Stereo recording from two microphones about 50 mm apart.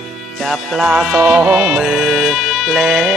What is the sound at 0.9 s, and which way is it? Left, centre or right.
Music, centre.